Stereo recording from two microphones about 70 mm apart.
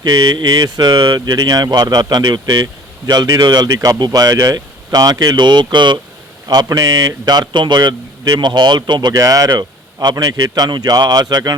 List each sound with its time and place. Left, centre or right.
0.0 s speech: right
3.1 s a man's voice: right
6.5 s speech: right
9.1 s a man's voice: right